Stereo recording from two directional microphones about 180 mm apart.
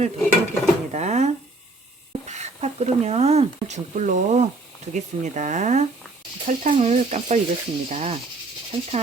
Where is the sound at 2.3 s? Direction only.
40° right (ahead or behind).